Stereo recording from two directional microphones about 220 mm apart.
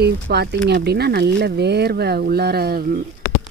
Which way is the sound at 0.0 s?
50° right (ahead or behind).